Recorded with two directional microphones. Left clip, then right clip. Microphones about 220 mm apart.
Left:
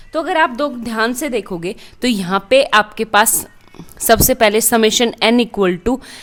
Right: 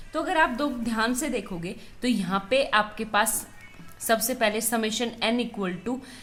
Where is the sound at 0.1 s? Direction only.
45° left (ahead or behind).